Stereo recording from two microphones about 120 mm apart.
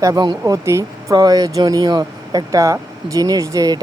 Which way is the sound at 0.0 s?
35° right (ahead or behind).